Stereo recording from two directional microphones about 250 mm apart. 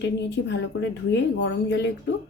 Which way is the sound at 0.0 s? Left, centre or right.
Left.